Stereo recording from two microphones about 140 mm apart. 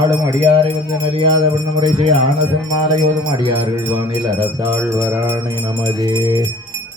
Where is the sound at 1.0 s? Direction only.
40° right (ahead or behind).